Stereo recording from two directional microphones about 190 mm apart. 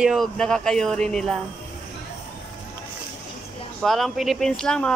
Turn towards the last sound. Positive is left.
turn(degrees=5)  # may be behind; listen again after turning